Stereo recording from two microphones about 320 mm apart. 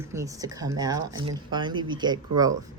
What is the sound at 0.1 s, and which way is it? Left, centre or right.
Speech, centre.